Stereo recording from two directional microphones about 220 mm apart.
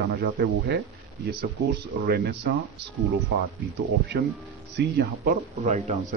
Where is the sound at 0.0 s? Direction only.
45° right (ahead or behind).